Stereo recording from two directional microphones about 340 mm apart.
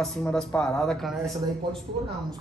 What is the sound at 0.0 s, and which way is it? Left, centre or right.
Speech, centre.